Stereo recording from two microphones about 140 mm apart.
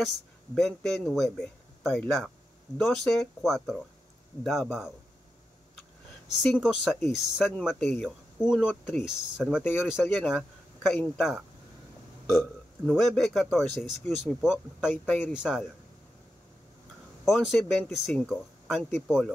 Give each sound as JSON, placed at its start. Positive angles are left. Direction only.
{"t": 0.6, "sound": "a man's voice", "side_deg": 0}
{"t": 6.4, "sound": "a man's voice", "side_deg": 0}
{"t": 9.6, "sound": "speech", "side_deg": 15}
{"t": 10.2, "sound": "a sound", "side_deg": -5}
{"t": 11.0, "sound": "a man's voice", "side_deg": 0}
{"t": 15.0, "sound": "speech", "side_deg": 10}
{"t": 15.3, "sound": "a man's voice", "side_deg": -5}
{"t": 17.2, "sound": "a man's voice", "side_deg": 0}